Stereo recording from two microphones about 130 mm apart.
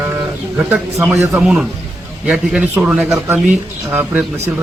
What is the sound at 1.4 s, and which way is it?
A man's voice, 5° right (ahead or behind).